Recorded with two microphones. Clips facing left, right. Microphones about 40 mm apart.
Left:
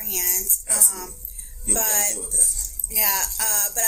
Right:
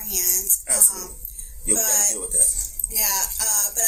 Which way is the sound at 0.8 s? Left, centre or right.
Left.